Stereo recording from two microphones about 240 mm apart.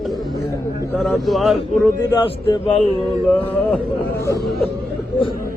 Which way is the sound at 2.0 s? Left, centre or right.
Centre.